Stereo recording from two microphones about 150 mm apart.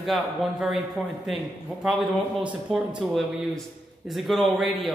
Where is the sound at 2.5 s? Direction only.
10° right (ahead or behind).